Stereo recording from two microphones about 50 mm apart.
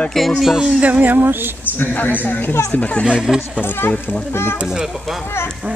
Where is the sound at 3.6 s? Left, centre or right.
Left.